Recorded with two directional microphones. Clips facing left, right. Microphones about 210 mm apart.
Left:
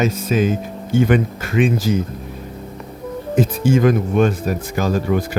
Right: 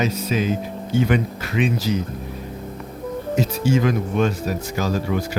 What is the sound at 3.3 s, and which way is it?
Speech, 50° left (ahead or behind).